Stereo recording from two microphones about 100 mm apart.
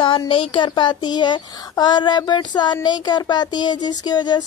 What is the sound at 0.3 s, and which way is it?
Speech, 60° left (ahead or behind).